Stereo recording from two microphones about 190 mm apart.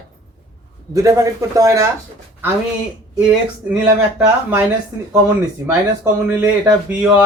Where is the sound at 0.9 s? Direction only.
15° right (ahead or behind).